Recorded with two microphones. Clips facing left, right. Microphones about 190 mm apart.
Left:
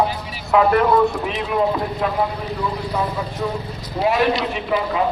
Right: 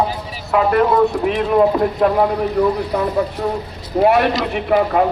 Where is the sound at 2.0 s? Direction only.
55° right (ahead or behind).